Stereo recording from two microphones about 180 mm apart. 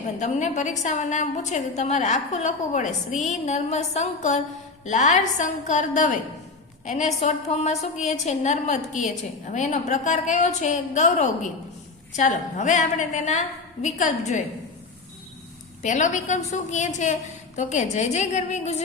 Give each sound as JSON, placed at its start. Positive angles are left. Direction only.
{"t": 0.2, "sound": "a woman's voice", "side_deg": 40}
{"t": 15.8, "sound": "a woman's voice", "side_deg": 45}